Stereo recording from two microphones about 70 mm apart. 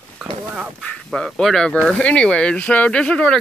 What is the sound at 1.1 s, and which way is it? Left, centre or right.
Speech, centre.